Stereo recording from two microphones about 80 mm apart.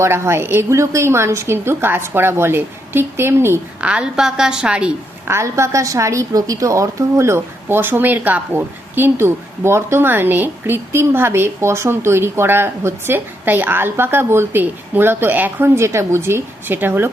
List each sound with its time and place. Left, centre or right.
0.0 s a woman's voice: right
3.8 s a woman's voice: centre
5.3 s a woman's voice: right